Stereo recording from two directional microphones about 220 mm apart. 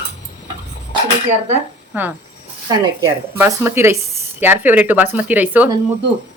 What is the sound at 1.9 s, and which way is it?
Speech, 10° right (ahead or behind).